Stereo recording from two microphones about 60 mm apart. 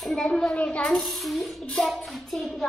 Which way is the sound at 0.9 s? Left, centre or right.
Centre.